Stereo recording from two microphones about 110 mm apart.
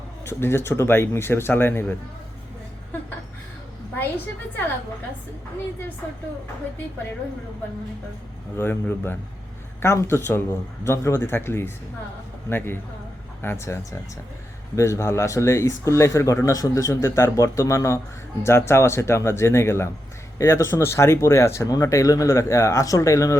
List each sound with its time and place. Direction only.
0.3 s speech: 20° left (ahead or behind)
8.5 s speech: 20° left (ahead or behind)